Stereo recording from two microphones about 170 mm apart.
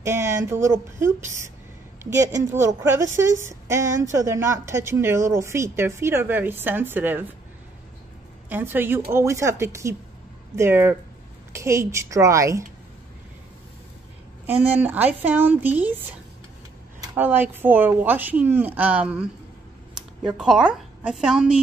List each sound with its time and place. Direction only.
0.0 s a woman's voice: 15° right (ahead or behind)
8.5 s a woman's voice: 10° right (ahead or behind)
14.4 s a woman's voice: 10° right (ahead or behind)